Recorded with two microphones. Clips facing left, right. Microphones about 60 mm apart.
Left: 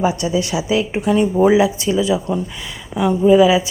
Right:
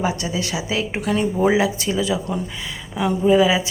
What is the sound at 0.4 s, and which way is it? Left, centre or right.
Speech, left.